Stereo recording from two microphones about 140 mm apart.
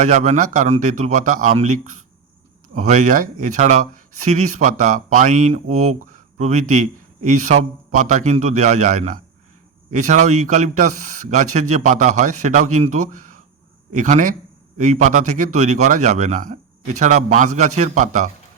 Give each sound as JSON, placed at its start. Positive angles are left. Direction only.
{"t": 0.0, "sound": "speech", "side_deg": -55}
{"t": 1.5, "sound": "speech", "side_deg": -60}